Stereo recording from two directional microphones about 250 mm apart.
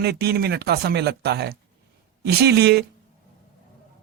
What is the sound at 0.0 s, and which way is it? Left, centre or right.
Speech, right.